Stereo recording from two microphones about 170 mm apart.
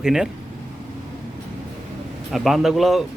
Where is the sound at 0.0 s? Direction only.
5° right (ahead or behind).